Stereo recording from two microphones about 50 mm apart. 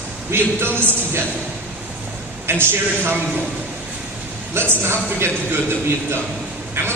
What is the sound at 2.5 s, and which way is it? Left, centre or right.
Speech, right.